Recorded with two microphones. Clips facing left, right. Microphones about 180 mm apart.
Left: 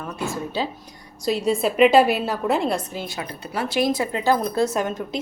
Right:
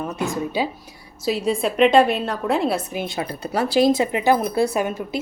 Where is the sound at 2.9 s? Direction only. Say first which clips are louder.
Right 4 dB; 25° right (ahead or behind).